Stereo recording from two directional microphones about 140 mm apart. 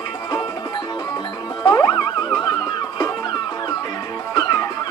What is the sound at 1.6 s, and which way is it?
Music, 30° left (ahead or behind).